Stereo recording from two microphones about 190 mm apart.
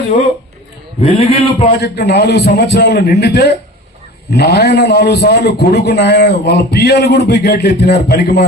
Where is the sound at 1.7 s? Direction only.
60° left (ahead or behind).